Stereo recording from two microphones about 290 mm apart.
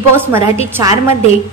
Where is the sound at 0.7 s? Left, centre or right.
Centre.